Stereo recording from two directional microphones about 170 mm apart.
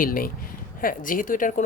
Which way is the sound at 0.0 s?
55° left (ahead or behind).